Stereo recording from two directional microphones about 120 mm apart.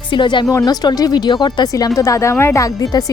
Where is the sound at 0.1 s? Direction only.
40° left (ahead or behind).